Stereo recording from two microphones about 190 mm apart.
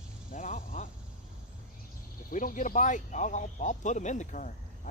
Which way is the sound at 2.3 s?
45° left (ahead or behind).